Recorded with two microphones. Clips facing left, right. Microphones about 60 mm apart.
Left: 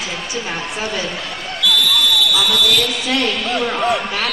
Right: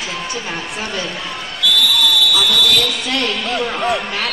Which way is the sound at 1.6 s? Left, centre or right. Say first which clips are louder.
Even; centre.